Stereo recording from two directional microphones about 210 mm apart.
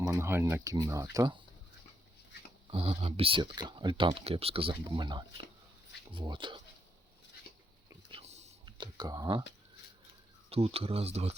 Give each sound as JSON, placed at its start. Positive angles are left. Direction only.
{"t": 0.0, "sound": "speech", "side_deg": -15}
{"t": 2.6, "sound": "speech", "side_deg": -30}
{"t": 8.1, "sound": "whispering", "side_deg": -30}
{"t": 8.6, "sound": "speech", "side_deg": -20}
{"t": 10.5, "sound": "speech", "side_deg": -30}